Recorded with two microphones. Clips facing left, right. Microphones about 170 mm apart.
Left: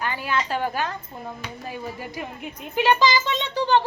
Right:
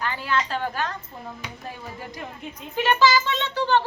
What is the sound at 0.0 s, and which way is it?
A woman's voice, 10° left (ahead or behind).